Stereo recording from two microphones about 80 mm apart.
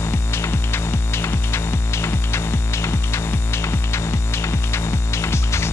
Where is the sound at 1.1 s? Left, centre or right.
Left.